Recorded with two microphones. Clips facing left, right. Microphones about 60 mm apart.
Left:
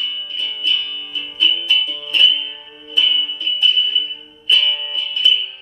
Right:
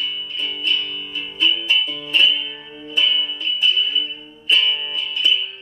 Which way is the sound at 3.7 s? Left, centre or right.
Centre.